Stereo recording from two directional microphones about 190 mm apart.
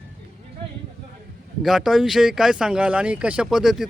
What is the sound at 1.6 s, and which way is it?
Speech, centre (ahead or behind).